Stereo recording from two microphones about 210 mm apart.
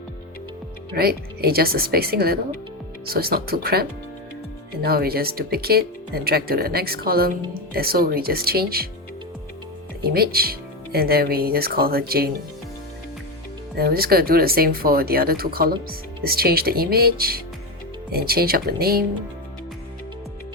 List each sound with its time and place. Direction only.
0.9 s speech: 45° right (ahead or behind)
10.1 s speech: 45° right (ahead or behind)
13.7 s speech: 45° right (ahead or behind)